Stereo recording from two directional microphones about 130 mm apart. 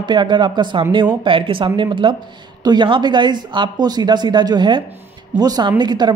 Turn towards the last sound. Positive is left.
turn(degrees=-35)  # may be behind; listen again after turning